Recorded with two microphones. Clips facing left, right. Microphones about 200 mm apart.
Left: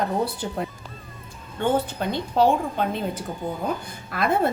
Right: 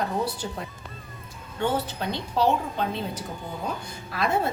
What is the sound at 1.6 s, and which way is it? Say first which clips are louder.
Speech: left 4 dB; 50° left (ahead or behind).